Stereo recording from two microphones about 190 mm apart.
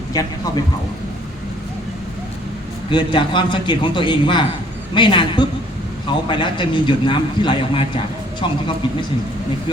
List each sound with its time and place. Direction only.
0.1 s a man's voice: 20° left (ahead or behind)
2.9 s a man's voice: 25° left (ahead or behind)